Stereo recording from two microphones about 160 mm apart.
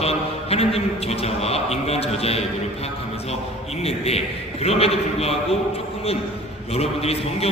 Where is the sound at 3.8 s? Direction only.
40° left (ahead or behind).